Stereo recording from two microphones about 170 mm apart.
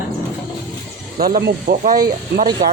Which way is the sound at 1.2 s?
60° right (ahead or behind).